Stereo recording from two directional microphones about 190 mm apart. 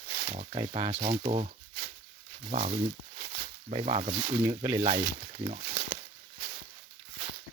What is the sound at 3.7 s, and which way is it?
Speech, 30° right (ahead or behind).